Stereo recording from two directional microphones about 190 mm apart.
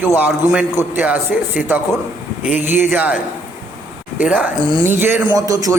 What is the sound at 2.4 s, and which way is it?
Speech, 40° left (ahead or behind).